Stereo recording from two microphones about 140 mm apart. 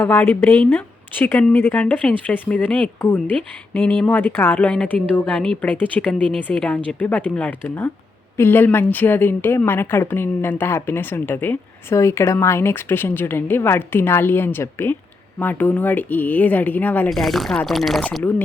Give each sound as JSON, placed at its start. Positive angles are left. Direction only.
{"t": 0.0, "sound": "a woman's voice", "side_deg": 15}
{"t": 17.1, "sound": "speech", "side_deg": 0}
{"t": 18.2, "sound": "a woman's voice", "side_deg": 10}